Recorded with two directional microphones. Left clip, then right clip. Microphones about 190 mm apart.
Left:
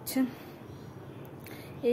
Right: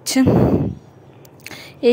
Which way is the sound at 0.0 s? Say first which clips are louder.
Right 14 dB; 50° right (ahead or behind).